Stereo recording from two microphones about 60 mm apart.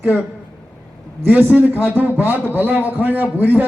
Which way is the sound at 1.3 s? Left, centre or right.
Right.